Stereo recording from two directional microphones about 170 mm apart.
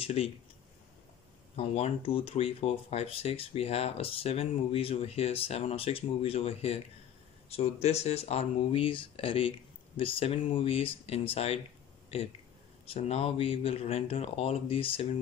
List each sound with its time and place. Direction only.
0.0 s speech: 35° left (ahead or behind)
1.6 s speech: 35° left (ahead or behind)